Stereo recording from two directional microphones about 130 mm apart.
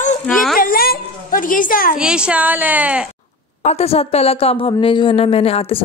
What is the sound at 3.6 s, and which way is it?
Speech, 55° left (ahead or behind).